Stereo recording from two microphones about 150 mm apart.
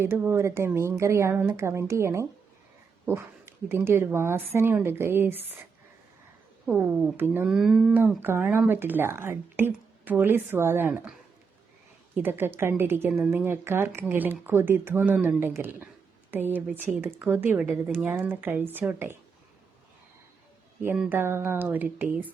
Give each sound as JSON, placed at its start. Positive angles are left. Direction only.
{"t": 0.0, "sound": "speech", "side_deg": -15}
{"t": 6.7, "sound": "speech", "side_deg": -15}
{"t": 12.1, "sound": "speech", "side_deg": -15}
{"t": 21.1, "sound": "speech", "side_deg": -15}